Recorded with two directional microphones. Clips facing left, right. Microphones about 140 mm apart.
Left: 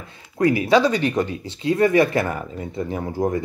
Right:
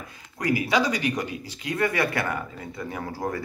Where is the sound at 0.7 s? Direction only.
15° right (ahead or behind).